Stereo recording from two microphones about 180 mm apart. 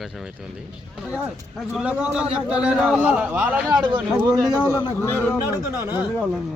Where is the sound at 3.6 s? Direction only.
25° right (ahead or behind).